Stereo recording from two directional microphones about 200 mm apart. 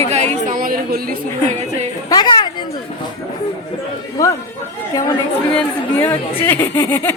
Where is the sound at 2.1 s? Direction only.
20° left (ahead or behind).